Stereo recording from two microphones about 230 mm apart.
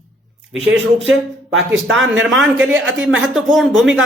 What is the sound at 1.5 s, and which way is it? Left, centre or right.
Speech, right.